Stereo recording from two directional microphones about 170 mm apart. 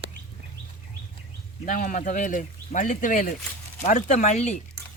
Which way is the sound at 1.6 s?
55° left (ahead or behind).